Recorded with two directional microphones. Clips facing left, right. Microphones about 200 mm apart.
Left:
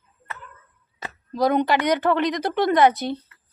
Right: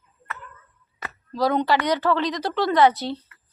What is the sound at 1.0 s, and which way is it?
A woman's voice, 20° left (ahead or behind).